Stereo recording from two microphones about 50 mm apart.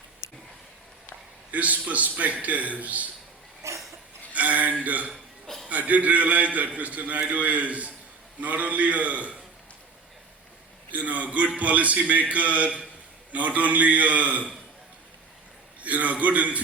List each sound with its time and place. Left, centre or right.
1.5 s a man's voice: right
3.6 s a sound: right
4.4 s a sound: right
4.8 s a man's voice: right
10.9 s a man's voice: right
15.8 s a man's voice: right